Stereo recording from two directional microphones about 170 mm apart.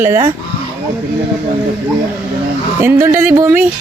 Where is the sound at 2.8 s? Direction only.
15° right (ahead or behind).